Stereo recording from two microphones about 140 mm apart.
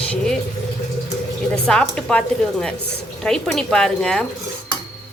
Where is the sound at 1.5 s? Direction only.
5° left (ahead or behind).